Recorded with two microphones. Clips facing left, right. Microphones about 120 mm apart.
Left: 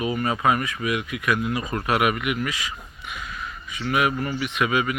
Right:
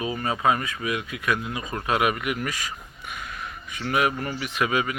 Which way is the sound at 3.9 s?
35° right (ahead or behind).